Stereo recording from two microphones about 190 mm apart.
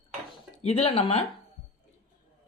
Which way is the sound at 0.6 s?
30° left (ahead or behind).